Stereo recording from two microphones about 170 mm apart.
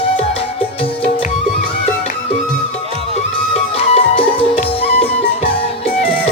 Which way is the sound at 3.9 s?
35° left (ahead or behind).